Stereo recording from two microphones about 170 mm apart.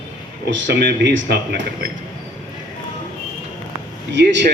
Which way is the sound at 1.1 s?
85° right.